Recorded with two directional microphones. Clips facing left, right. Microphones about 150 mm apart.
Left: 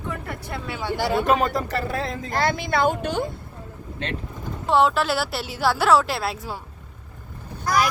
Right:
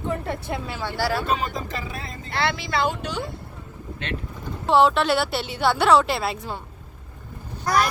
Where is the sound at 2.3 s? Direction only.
45° left (ahead or behind).